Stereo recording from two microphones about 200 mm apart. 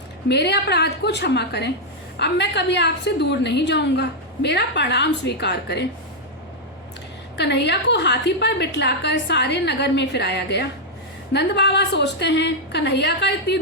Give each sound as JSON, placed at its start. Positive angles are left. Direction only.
{"t": 0.3, "sound": "a woman's voice", "side_deg": 60}
{"t": 7.3, "sound": "a woman's voice", "side_deg": 60}